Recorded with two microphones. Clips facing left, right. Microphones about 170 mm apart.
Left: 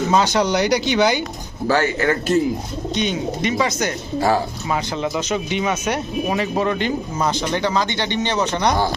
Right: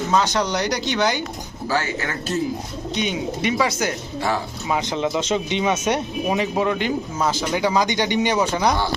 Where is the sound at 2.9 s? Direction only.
10° right (ahead or behind).